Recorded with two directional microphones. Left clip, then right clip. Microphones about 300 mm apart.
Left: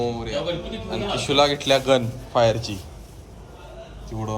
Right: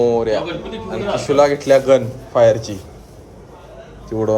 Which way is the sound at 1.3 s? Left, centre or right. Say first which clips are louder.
Right 6 dB; centre.